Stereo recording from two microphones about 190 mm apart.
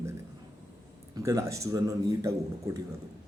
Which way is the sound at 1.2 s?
15° right (ahead or behind).